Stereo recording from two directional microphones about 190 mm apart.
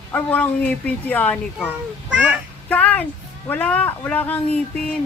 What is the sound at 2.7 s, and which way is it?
Speech, 5° left (ahead or behind).